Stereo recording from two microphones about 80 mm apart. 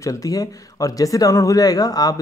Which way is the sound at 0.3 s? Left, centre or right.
Left.